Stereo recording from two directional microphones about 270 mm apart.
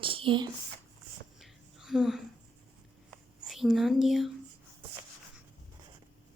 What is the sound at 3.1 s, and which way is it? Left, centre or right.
Writing, centre.